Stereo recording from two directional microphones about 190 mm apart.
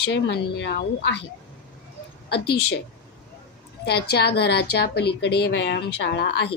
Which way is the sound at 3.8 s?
60° left (ahead or behind).